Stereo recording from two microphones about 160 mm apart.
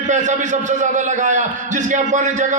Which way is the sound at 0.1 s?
50° right (ahead or behind).